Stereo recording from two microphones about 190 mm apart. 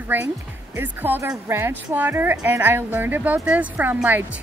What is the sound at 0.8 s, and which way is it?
A woman's voice, 10° right (ahead or behind).